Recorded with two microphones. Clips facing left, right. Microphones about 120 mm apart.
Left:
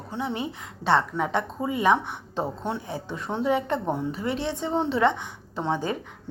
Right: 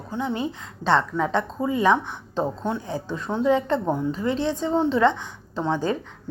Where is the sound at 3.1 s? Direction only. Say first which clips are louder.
Right 4 dB; 25° left (ahead or behind).